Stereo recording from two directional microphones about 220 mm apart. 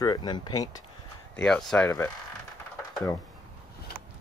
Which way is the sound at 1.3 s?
5° left (ahead or behind).